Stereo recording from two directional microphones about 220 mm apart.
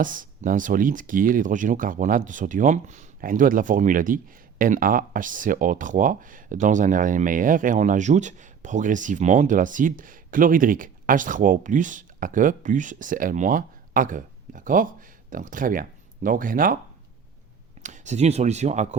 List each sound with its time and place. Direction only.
0.0 s speech: 35° right (ahead or behind)
17.8 s speech: 35° right (ahead or behind)